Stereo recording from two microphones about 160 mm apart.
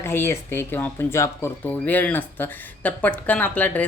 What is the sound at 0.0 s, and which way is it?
Speech, 15° left (ahead or behind).